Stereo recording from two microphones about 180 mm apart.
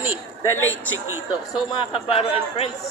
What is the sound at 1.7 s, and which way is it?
Speech, 30° left (ahead or behind).